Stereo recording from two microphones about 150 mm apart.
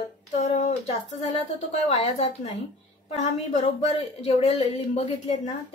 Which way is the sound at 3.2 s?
45° left (ahead or behind).